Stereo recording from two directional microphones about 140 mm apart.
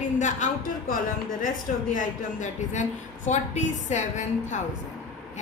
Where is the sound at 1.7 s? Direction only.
70° left (ahead or behind).